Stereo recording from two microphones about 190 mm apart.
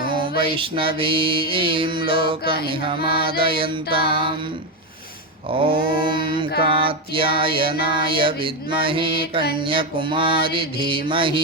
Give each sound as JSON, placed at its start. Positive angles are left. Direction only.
{"t": 0.1, "sound": "music", "side_deg": -25}
{"t": 5.6, "sound": "music", "side_deg": -25}